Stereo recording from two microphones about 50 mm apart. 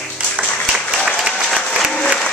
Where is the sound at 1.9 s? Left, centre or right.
Centre.